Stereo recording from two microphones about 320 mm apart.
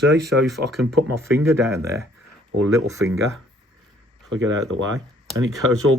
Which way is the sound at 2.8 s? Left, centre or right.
Centre.